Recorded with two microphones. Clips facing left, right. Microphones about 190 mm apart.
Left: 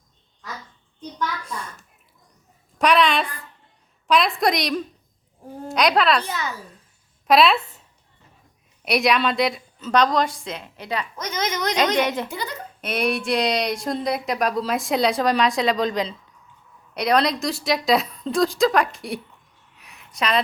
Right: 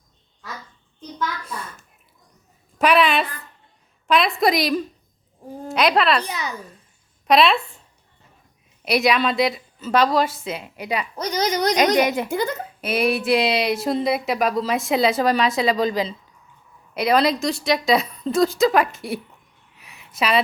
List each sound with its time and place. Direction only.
2.7 s a sound: 5° right (ahead or behind)
6.2 s a woman's voice: 15° right (ahead or behind)
7.3 s speech: centre (ahead or behind)
8.8 s speech: centre (ahead or behind)
11.2 s a woman's voice: 35° right (ahead or behind)
11.9 s a woman's voice: 10° right (ahead or behind)
12.3 s speech: 50° right (ahead or behind)
12.8 s speech: 5° right (ahead or behind)
19.7 s a sound: centre (ahead or behind)